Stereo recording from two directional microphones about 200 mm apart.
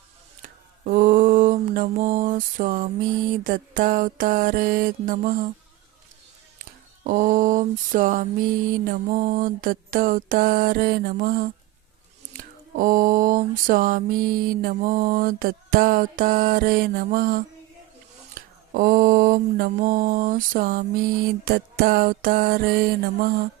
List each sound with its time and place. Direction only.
0.4 s a sound: 40° right (ahead or behind)
7.0 s mantra: 45° right (ahead or behind)
18.7 s mantra: 45° right (ahead or behind)